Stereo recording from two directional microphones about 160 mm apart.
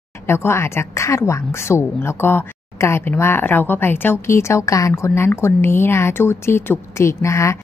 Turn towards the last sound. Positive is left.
turn(degrees=20)  # may be behind; listen again after turning